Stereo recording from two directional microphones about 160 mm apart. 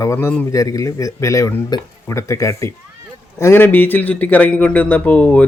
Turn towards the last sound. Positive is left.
turn(degrees=10)  # may be behind; listen again after turning